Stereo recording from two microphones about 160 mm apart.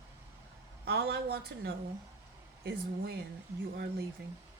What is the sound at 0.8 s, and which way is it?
Speech, 85° right.